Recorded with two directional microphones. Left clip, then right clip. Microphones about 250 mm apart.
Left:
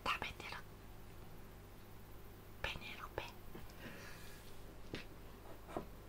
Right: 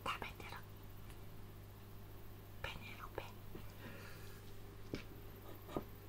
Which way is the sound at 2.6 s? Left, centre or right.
Centre.